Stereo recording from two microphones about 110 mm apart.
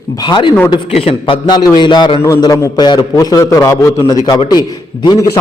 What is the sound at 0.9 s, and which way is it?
Speech, 65° left (ahead or behind).